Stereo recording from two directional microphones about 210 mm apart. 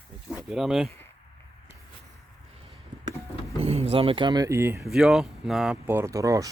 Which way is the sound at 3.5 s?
30° right (ahead or behind).